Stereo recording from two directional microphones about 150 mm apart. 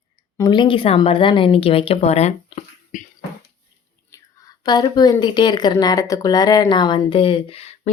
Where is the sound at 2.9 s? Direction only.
60° left (ahead or behind).